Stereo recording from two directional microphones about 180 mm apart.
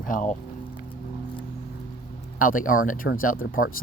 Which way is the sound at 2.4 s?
50° left (ahead or behind).